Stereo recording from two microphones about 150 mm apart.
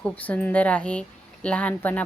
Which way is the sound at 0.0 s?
10° left (ahead or behind).